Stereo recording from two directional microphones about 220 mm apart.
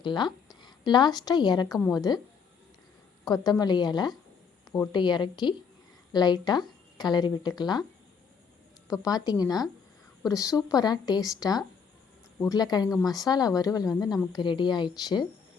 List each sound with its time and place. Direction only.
0.0 s a woman's voice: 20° left (ahead or behind)
3.2 s speech: 15° left (ahead or behind)
9.0 s speech: 15° left (ahead or behind)